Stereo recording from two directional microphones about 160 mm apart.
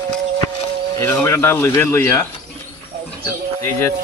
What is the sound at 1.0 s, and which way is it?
Speech, 15° left (ahead or behind).